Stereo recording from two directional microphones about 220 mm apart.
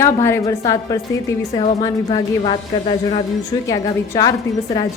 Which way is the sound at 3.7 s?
15° left (ahead or behind).